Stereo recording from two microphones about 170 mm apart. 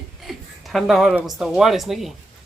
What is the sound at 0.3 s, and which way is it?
Speech, centre (ahead or behind).